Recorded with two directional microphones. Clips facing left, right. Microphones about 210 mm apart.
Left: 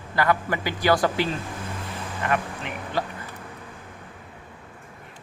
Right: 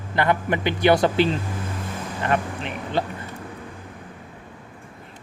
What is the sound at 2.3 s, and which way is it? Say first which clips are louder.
Speech: right 3 dB; 30° right (ahead or behind).